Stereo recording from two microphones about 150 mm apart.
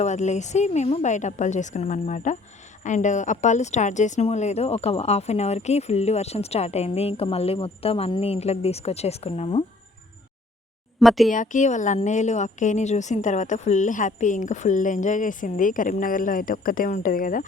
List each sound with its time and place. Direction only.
0.0 s speech: 50° left (ahead or behind)
11.0 s speech: centre (ahead or behind)
11.3 s a woman's voice: 55° left (ahead or behind)